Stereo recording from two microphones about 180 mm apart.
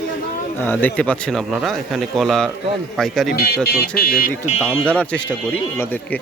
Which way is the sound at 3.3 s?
60° left (ahead or behind).